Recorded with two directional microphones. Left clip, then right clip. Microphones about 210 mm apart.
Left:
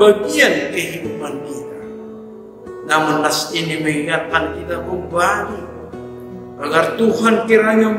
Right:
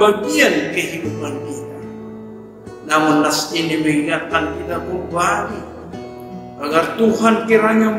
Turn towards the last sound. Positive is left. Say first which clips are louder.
# left 1 dB
turn(degrees=15)  # may be behind; listen again after turning